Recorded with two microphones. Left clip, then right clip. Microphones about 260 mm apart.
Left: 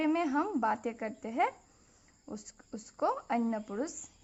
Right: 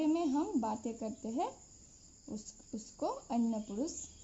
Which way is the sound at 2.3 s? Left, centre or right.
Centre.